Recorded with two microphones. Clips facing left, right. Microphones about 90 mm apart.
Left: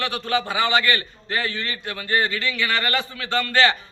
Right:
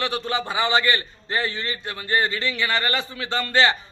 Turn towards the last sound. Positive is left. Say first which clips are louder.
# left 1 dB
turn(degrees=-20)  # may be behind; listen again after turning